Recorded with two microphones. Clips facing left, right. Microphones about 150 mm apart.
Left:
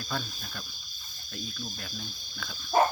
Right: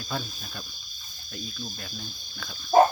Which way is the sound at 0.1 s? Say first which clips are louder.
Right 2 dB; 5° right (ahead or behind).